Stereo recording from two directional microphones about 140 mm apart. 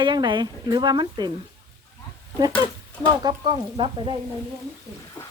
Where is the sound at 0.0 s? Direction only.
30° right (ahead or behind).